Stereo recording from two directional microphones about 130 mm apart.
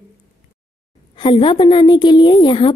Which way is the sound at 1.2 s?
40° left (ahead or behind).